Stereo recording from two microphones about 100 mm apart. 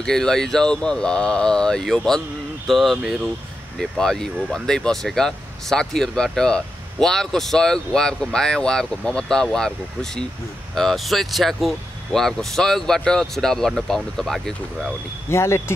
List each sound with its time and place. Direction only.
0.0 s speech: 5° left (ahead or behind)
4.0 s speech: 5° left (ahead or behind)
15.2 s speech: 25° left (ahead or behind)